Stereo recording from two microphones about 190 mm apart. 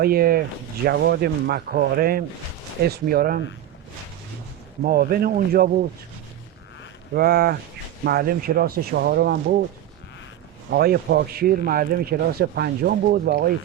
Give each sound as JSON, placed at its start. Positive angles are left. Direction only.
{"t": 0.0, "sound": "a man's voice", "side_deg": -50}
{"t": 4.8, "sound": "a man's voice", "side_deg": -50}
{"t": 7.1, "sound": "a man's voice", "side_deg": -55}
{"t": 10.7, "sound": "a man's voice", "side_deg": -55}